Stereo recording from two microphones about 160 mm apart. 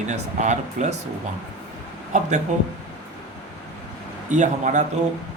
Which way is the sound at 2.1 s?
50° right (ahead or behind).